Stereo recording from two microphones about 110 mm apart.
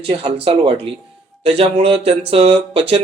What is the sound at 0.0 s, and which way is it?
Speech, 50° right (ahead or behind).